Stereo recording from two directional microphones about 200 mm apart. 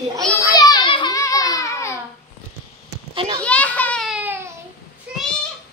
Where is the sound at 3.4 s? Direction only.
5° left (ahead or behind); by 4.4 s 10° right (ahead or behind).